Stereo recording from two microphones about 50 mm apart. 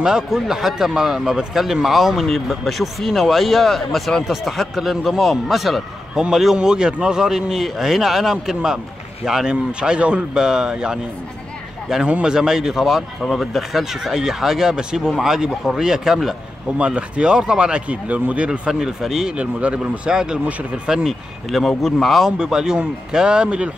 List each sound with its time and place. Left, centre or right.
0.0 s speech: centre
12.1 s speech: right
12.4 s speech: centre
16.7 s speech: right
18.7 s speech: centre
19.3 s speech: right
20.1 s speech: centre
22.4 s speech: centre